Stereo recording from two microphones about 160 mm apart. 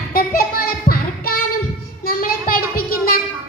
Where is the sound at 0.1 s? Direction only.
65° left (ahead or behind).